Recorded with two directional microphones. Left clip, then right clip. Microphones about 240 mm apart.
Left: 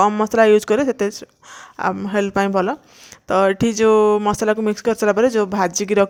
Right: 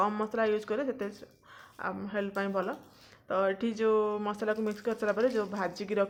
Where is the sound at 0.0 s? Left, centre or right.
Left.